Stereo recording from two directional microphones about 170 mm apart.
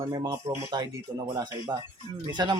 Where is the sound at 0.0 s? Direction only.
30° right (ahead or behind).